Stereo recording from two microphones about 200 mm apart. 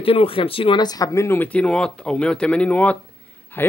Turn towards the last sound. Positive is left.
turn(degrees=10)  # may be behind; listen again after turning